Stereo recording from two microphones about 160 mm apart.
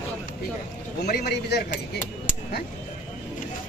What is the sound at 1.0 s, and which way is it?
Speech, 90° left.